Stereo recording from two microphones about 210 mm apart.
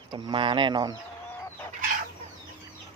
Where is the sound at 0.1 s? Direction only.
25° right (ahead or behind).